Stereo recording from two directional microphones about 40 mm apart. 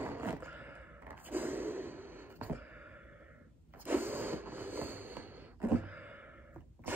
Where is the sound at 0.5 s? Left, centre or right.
Right.